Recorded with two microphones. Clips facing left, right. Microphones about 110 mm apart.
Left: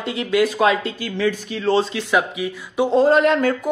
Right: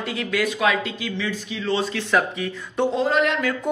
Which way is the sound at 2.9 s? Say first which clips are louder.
Left 9 dB; 40° left (ahead or behind).